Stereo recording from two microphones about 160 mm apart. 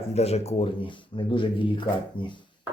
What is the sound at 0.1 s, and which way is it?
Speech, 40° left (ahead or behind).